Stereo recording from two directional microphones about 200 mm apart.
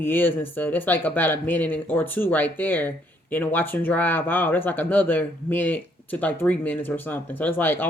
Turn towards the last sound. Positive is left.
turn(degrees=10)  # may be behind; listen again after turning